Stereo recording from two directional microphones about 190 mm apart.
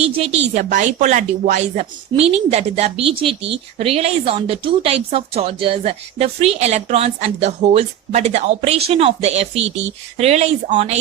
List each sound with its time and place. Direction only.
0.2 s a woman's voice: 35° right (ahead or behind)